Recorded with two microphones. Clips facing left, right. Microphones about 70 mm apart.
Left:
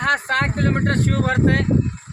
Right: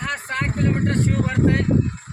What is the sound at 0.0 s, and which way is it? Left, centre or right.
Speech, left.